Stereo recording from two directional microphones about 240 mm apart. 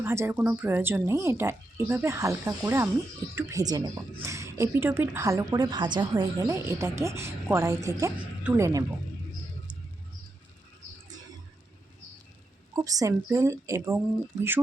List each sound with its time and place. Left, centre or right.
0.0 s a woman's voice: centre
12.7 s a woman's voice: centre